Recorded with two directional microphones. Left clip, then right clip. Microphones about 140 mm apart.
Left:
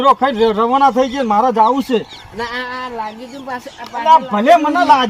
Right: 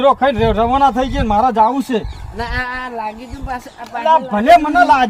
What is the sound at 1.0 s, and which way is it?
Speech, 55° right (ahead or behind).